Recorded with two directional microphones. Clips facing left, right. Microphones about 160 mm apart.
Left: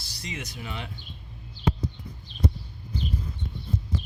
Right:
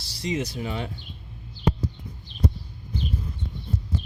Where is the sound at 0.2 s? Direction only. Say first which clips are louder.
Right 10 dB; 35° right (ahead or behind).